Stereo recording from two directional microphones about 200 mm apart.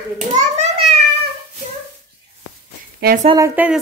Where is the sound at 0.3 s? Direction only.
35° right (ahead or behind).